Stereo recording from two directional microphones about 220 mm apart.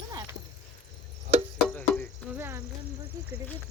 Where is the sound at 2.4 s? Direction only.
10° right (ahead or behind).